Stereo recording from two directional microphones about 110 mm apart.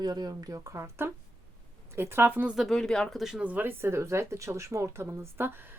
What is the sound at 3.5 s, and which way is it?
Speech, 20° right (ahead or behind).